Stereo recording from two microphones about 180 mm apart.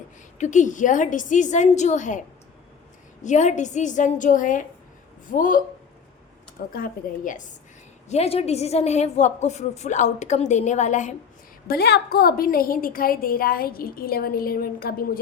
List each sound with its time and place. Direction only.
0.3 s a woman's voice: 40° left (ahead or behind)
3.2 s a woman's voice: 40° left (ahead or behind)
6.7 s a woman's voice: 50° left (ahead or behind)
8.1 s a woman's voice: 35° left (ahead or behind)
11.7 s a woman's voice: 60° left (ahead or behind)